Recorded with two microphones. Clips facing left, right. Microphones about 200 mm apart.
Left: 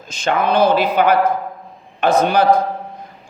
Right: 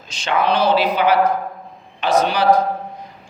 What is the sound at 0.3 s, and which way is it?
A man's voice, 50° left (ahead or behind).